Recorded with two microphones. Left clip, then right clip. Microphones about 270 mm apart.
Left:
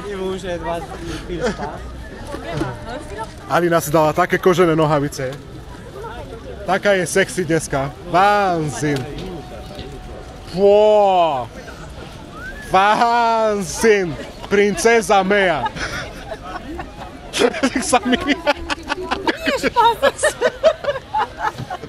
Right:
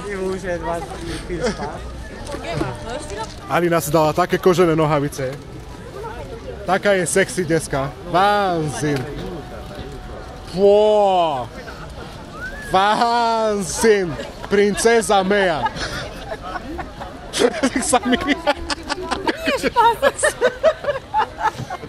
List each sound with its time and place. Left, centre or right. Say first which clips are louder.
1.0 s a man's voice: left 1 dB; centre
3.5 s a man's voice: left 2 dB; centre
6.7 s a man's voice: left 1 dB; centre
10.7 s a man's voice: left 2 dB; centre
11.0 s speech: left 2 dB; left
12.7 s a man's voice: left 2 dB; centre
17.3 s speech: left 1 dB; centre
19.2 s a sound: left 1 dB; centre